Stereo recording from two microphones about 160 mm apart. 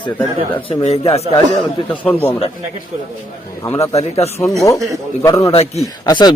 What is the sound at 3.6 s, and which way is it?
Speech, 20° left (ahead or behind).